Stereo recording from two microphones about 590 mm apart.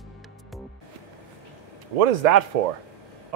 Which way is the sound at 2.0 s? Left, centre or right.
Right.